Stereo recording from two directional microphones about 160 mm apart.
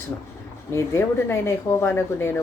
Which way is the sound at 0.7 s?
15° left (ahead or behind).